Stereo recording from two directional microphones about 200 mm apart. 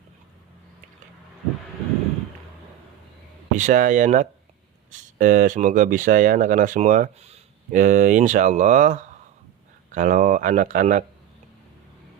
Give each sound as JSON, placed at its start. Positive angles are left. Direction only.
{"t": 3.5, "sound": "speech", "side_deg": -40}